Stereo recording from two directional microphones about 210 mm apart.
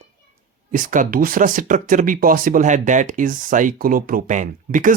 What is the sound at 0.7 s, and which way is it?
Speech, 40° right (ahead or behind).